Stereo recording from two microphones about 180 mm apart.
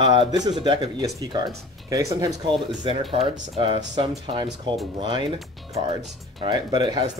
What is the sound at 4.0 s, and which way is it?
Speech, 25° right (ahead or behind).